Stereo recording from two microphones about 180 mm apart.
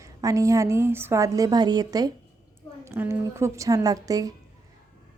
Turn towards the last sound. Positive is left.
turn(degrees=-20)  # may be behind; listen again after turning